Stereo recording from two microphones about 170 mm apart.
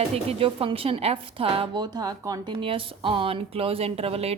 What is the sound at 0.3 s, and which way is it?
A woman's voice, 35° right (ahead or behind).